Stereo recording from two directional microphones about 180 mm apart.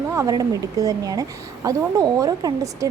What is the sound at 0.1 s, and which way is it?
Speech, 20° right (ahead or behind).